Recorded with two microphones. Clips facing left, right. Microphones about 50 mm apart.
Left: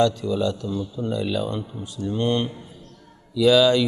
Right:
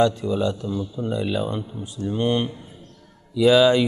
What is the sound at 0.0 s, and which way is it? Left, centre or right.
Speech, centre.